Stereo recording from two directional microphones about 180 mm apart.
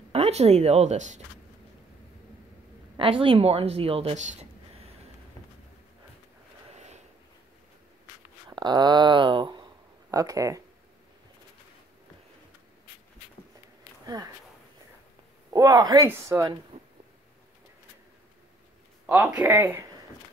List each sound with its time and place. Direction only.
0.1 s speech: 35° right (ahead or behind)
3.0 s speech: 30° right (ahead or behind)
6.7 s vehicle: 40° right (ahead or behind)
8.5 s speech: 25° right (ahead or behind)
14.0 s speech: 20° right (ahead or behind)
15.5 s speech: 20° right (ahead or behind)
19.0 s speech: 10° right (ahead or behind)